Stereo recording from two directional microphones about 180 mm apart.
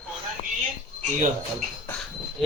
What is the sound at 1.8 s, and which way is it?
Bird, 5° left (ahead or behind).